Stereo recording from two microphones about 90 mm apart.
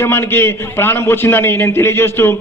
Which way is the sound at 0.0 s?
25° left (ahead or behind).